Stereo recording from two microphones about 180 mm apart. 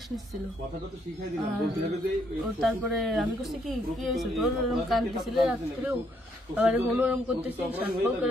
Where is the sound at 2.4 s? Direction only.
Centre (ahead or behind).